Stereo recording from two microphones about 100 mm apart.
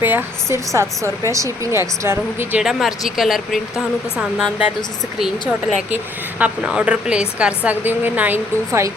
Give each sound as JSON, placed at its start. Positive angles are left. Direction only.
{"t": 0.0, "sound": "speech", "side_deg": -20}
{"t": 2.6, "sound": "a woman's voice", "side_deg": 0}